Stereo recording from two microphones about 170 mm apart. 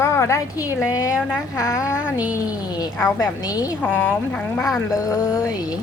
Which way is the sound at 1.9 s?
5° right (ahead or behind).